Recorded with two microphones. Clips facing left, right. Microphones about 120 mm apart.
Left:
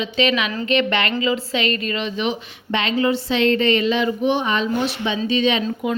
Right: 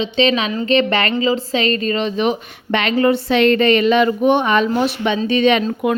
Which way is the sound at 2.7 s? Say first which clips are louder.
Right 4 dB; 60° right (ahead or behind).